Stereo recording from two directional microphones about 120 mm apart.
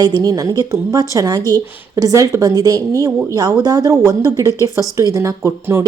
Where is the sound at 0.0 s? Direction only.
35° right (ahead or behind).